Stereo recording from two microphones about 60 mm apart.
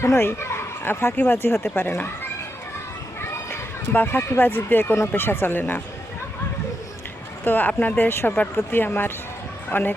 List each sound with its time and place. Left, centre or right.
0.0 s speech: left
3.2 s a sound: left
4.9 s speech: left
7.4 s speech: left